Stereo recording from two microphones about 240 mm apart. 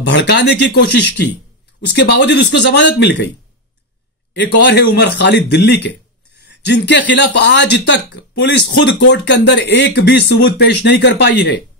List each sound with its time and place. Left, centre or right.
0.1 s speech: left
4.3 s speech: left
6.4 s a sound: left
7.1 s speech: left